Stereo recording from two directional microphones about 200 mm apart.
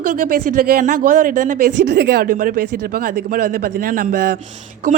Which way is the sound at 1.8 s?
55° right (ahead or behind).